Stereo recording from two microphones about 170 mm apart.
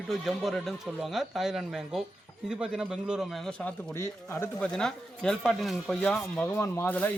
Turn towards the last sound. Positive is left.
turn(degrees=10)  # may be behind; listen again after turning